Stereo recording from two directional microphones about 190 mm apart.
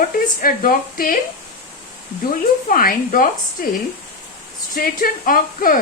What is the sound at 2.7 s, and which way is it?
Speech, 45° left (ahead or behind).